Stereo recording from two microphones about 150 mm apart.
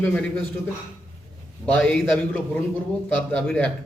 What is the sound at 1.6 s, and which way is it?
Speech, 30° left (ahead or behind).